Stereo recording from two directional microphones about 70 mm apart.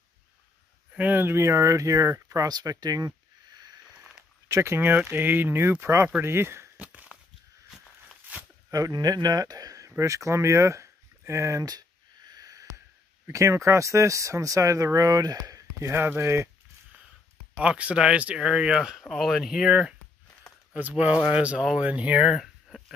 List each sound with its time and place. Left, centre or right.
0.9 s speech: right
4.5 s speech: right
6.8 s a sound: right
8.3 s a sound: right
8.7 s speech: right
11.6 s a sound: right
13.3 s speech: right
15.8 s speech: right
17.6 s speech: centre
18.9 s speech: centre
20.7 s speech: centre
22.3 s a sound: centre